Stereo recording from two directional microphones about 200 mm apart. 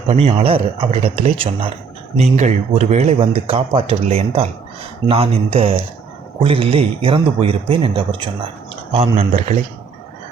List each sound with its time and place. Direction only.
0.1 s speech: 30° right (ahead or behind)